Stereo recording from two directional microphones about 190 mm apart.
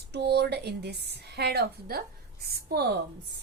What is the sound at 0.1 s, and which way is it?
A woman's voice, 60° right (ahead or behind).